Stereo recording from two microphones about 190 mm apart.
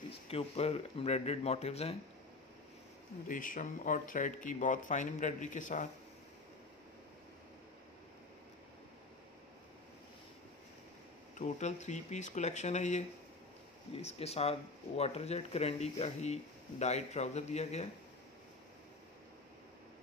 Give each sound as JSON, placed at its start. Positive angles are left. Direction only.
{"t": 0.3, "sound": "speech", "side_deg": 30}
{"t": 3.3, "sound": "speech", "side_deg": 45}
{"t": 11.3, "sound": "speech", "side_deg": 40}